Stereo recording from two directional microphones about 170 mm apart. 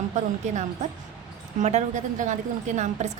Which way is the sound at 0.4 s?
45° right (ahead or behind).